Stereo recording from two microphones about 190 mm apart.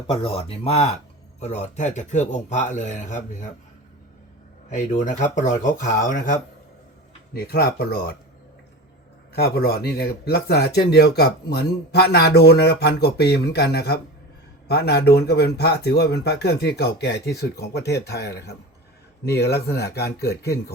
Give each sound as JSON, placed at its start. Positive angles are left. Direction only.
{"t": 0.1, "sound": "speech", "side_deg": 30}
{"t": 4.7, "sound": "speech", "side_deg": 40}
{"t": 7.3, "sound": "a man's voice", "side_deg": 55}
{"t": 9.3, "sound": "a man's voice", "side_deg": 55}